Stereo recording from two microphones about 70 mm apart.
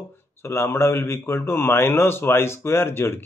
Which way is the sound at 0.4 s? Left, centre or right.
Left.